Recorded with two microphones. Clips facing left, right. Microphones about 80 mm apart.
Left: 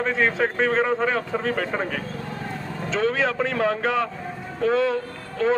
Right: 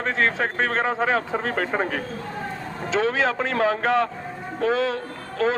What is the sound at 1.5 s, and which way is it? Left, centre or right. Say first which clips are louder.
Speech: even; right.